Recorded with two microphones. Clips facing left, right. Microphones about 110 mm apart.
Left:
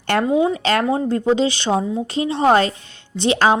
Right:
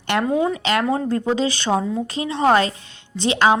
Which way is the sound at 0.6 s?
35° left (ahead or behind).